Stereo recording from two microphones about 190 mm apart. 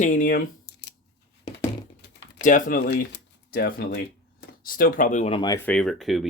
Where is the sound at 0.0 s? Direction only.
45° left (ahead or behind).